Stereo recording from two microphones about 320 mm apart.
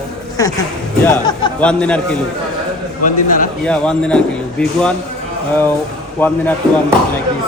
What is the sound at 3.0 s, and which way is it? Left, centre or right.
Speech, left.